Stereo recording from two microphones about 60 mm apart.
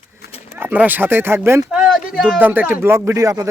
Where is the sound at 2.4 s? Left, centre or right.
Right.